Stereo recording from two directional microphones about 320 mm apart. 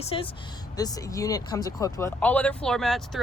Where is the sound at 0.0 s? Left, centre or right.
Centre.